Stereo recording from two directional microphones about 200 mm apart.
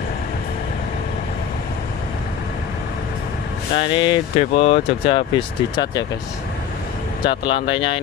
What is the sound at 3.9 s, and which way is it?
Speech, 25° left (ahead or behind).